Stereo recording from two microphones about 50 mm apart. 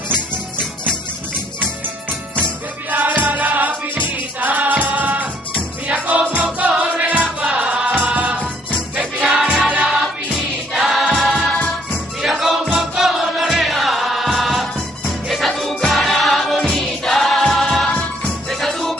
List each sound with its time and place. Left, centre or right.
2.9 s music: right
8.9 s music: centre
12.7 s chant: centre
15.2 s music: centre